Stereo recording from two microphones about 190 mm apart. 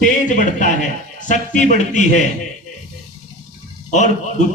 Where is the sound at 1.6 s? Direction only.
40° left (ahead or behind).